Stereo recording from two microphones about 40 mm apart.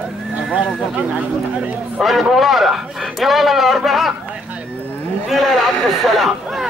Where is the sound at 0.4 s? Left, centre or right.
Right.